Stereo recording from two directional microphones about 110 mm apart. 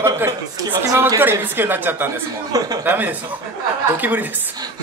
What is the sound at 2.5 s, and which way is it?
Speech, 35° right (ahead or behind).